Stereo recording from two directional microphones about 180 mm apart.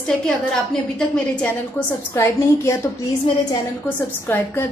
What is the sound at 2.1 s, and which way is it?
Speech, 15° left (ahead or behind).